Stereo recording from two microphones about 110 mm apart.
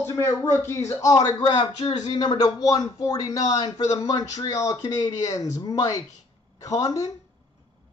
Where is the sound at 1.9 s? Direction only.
90° left.